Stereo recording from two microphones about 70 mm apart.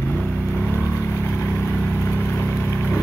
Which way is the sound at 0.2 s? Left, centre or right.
Centre.